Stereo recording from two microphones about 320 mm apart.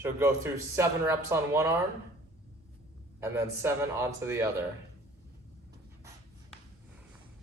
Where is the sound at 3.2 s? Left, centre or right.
Centre.